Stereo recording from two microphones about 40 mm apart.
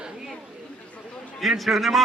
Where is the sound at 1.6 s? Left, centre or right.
Centre.